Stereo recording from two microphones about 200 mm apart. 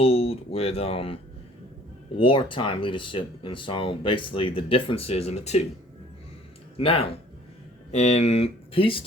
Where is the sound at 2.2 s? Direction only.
25° left (ahead or behind).